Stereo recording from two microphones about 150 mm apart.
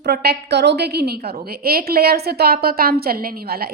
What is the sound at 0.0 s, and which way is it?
A woman's voice, 90° right.